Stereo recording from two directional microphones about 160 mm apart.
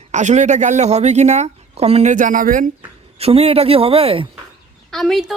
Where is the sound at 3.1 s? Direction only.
40° right (ahead or behind).